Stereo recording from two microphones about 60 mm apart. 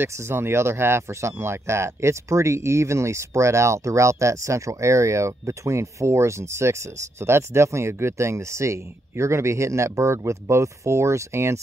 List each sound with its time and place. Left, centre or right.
0.0 s speech: right